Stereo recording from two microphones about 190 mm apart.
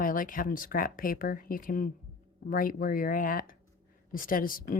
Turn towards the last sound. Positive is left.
turn(degrees=50)  # may be behind; listen again after turning